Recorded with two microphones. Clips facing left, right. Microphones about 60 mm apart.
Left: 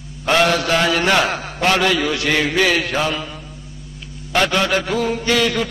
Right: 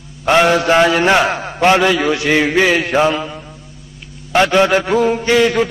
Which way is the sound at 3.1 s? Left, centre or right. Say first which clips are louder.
Right 5 dB; centre.